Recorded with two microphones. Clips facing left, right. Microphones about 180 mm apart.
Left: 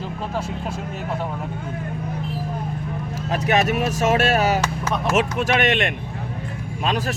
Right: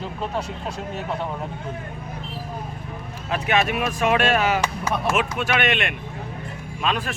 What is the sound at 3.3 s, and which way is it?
Speech, 40° left (ahead or behind).